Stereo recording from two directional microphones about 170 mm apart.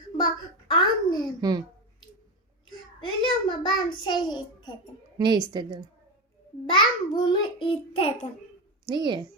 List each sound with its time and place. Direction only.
0.7 s babbling: 25° left (ahead or behind)
1.4 s speech: 25° right (ahead or behind)
2.6 s child singing: 30° left (ahead or behind)
4.0 s a child's voice: 25° left (ahead or behind)
5.1 s a woman's voice: 25° right (ahead or behind)
6.7 s a child's voice: 25° left (ahead or behind)
8.9 s a woman's voice: 25° right (ahead or behind)